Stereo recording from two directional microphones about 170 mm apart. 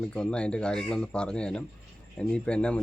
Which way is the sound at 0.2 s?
5° left (ahead or behind).